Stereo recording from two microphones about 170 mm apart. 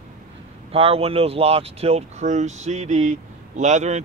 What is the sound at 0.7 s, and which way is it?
Speech, 35° right (ahead or behind).